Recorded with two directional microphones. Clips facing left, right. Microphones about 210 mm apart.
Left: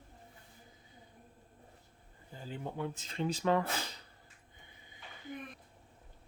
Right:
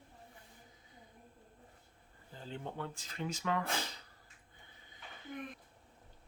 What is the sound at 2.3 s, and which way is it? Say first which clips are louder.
Speech: left 2 dB; 10° left (ahead or behind).